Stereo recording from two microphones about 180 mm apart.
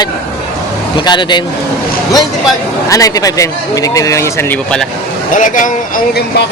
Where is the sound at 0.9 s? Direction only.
25° left (ahead or behind).